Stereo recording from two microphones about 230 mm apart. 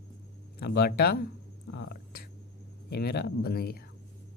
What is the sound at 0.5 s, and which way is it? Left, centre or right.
Speech, left.